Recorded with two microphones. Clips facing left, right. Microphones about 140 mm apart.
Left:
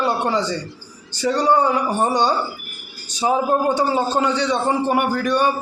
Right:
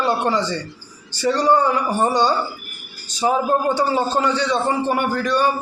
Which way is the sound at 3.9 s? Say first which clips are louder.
Even; 15° left (ahead or behind).